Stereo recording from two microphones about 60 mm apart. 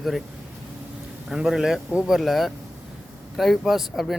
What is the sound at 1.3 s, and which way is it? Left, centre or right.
Speech, centre.